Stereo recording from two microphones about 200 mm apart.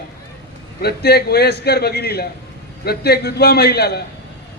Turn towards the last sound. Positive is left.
turn(degrees=55)  # may be behind; listen again after turning